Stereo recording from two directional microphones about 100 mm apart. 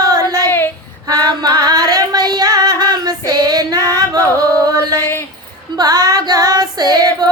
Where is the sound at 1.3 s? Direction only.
40° right (ahead or behind).